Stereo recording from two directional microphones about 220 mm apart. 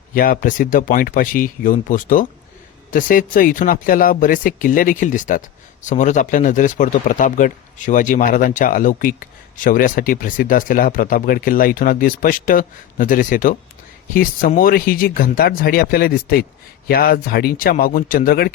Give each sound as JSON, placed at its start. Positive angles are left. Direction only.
{"t": 0.1, "sound": "speech", "side_deg": 40}